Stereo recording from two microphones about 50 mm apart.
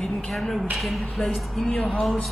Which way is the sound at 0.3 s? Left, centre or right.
Centre.